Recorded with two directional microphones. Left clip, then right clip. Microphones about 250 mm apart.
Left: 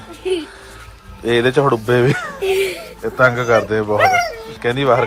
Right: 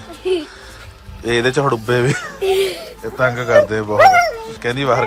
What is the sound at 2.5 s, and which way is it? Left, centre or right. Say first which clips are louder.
Speech: right 1 dB; right.